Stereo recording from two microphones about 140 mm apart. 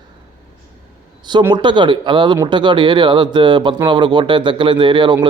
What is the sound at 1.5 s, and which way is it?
Speech, 35° right (ahead or behind).